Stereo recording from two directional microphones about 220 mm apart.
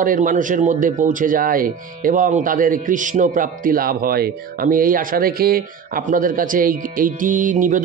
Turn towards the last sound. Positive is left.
turn(degrees=-35)  # may be behind; listen again after turning